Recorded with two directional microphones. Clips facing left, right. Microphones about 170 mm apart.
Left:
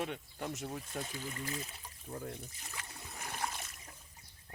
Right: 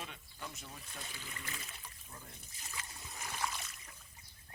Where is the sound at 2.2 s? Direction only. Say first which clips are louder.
Left 11 dB; 65° left (ahead or behind); by 3.9 s 50° left (ahead or behind).